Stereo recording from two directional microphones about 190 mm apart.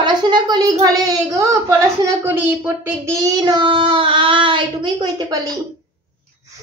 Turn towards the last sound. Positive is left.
turn(degrees=-20)  # may be behind; listen again after turning